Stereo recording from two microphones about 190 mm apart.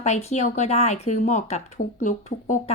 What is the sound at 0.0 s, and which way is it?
Speech, 35° left (ahead or behind).